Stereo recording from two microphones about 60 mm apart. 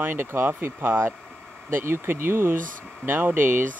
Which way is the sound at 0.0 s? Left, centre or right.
Right.